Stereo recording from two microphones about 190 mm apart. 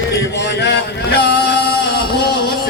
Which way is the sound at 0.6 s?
65° left (ahead or behind).